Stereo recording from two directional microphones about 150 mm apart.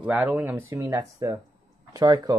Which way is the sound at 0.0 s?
5° right (ahead or behind).